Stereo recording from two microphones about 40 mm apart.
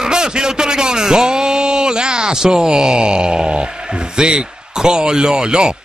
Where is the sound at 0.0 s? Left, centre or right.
Centre.